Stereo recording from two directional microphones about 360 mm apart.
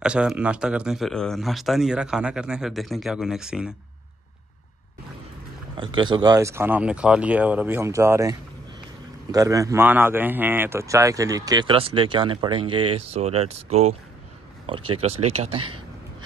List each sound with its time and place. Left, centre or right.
0.0 s speech: centre
5.8 s speech: centre